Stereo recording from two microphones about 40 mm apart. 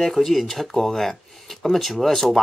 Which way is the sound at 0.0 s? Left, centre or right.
Centre.